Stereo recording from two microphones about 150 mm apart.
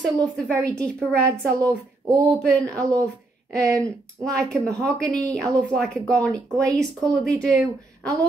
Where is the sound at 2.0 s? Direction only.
20° right (ahead or behind).